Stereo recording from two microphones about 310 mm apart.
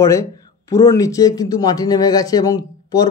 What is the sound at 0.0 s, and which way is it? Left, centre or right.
Speech, centre.